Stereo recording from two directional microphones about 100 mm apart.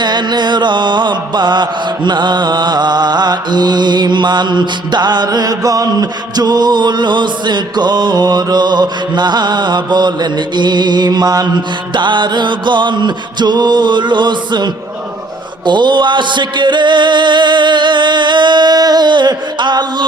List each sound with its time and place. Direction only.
0.0 s mantra: 45° right (ahead or behind)